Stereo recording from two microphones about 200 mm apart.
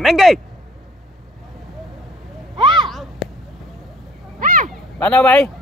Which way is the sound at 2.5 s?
25° right (ahead or behind).